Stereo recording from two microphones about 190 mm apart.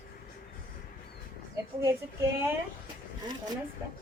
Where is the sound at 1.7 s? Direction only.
15° right (ahead or behind).